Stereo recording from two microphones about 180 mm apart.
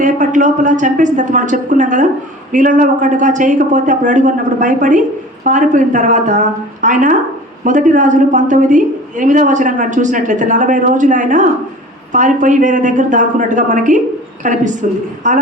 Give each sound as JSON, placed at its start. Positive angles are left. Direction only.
{"t": 0.0, "sound": "speech", "side_deg": -45}